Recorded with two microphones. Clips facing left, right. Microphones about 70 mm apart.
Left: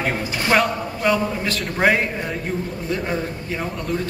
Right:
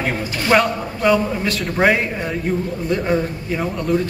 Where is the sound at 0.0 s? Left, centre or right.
Centre.